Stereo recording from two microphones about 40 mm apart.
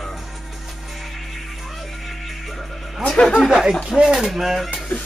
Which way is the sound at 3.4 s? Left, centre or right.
Centre.